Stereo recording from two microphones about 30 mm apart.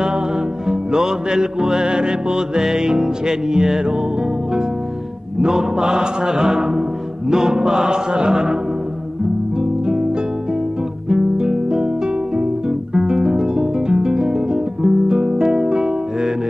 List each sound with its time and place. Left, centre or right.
0.7 s music: centre
5.4 s music: right
9.6 s music: right
11.1 s music: centre
12.4 s guitar: right